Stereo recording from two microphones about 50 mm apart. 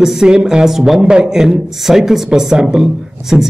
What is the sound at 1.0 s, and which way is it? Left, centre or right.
A man's voice, centre.